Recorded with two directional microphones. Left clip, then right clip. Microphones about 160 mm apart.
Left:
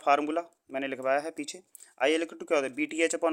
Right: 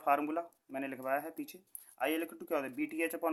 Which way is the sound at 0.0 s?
40° left (ahead or behind).